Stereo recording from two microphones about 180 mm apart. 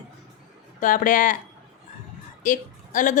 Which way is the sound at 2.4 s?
45° left (ahead or behind).